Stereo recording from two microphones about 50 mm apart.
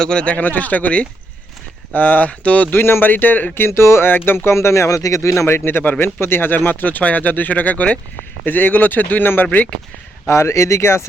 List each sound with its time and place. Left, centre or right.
0.0 s speech: centre
0.3 s speech: left
2.7 s speech: left
3.5 s speech: left
5.8 s speech: left
6.1 s speech: left
8.4 s speech: left
10.2 s speech: left